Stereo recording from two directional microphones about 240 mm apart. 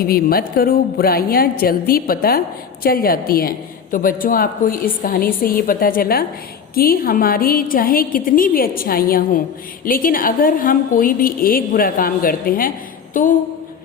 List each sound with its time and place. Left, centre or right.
0.0 s a woman's voice: left